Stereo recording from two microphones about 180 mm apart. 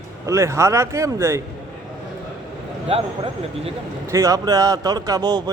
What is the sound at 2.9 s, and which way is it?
Speech, 30° right (ahead or behind).